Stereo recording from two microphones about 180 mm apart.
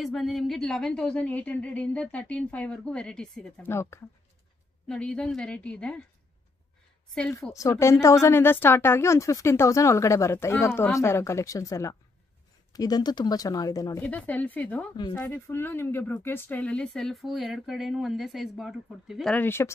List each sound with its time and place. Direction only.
0.0 s speech: centre (ahead or behind)
7.5 s a woman's voice: 20° left (ahead or behind)
14.0 s a woman's voice: 10° left (ahead or behind)